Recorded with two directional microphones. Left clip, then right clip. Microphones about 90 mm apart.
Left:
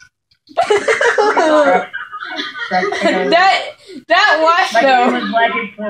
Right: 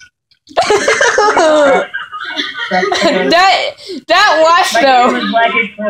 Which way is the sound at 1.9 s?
30° right (ahead or behind).